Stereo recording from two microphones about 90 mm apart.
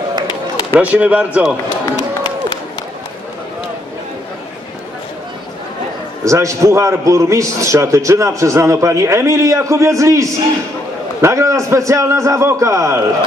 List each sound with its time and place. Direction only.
0.3 s run: 50° left (ahead or behind)
0.7 s speech: 15° right (ahead or behind)
6.2 s a man's voice: 35° right (ahead or behind)